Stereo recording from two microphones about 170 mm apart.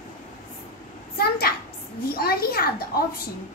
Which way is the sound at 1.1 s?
65° left (ahead or behind).